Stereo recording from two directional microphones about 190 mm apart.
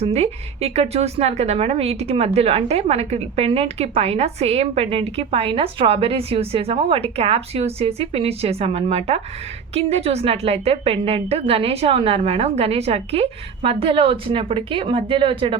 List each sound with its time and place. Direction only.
0.0 s a woman's voice: 35° right (ahead or behind)